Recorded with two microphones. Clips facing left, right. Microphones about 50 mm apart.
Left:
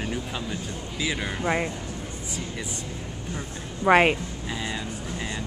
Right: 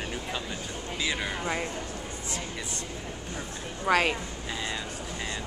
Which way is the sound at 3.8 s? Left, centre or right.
Left.